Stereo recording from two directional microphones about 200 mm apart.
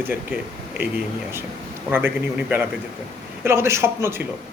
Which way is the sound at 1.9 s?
10° right (ahead or behind).